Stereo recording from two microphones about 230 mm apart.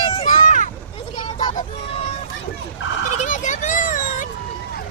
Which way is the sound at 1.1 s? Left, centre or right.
Left.